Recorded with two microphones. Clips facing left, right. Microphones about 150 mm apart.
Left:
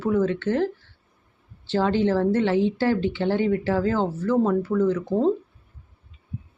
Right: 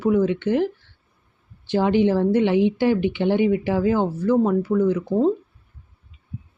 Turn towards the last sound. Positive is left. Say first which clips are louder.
# right 2 dB
turn(degrees=-5)  # may be behind; listen again after turning